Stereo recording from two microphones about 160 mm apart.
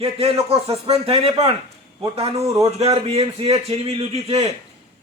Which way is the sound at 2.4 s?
20° right (ahead or behind).